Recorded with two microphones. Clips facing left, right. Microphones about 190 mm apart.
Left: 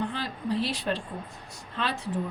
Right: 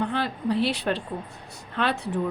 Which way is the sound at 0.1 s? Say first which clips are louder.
Right 5 dB; 60° right (ahead or behind).